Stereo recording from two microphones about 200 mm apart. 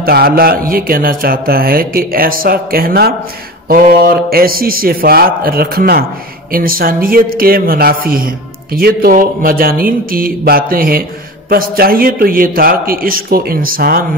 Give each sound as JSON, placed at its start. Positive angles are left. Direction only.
{"t": 0.0, "sound": "speech", "side_deg": -50}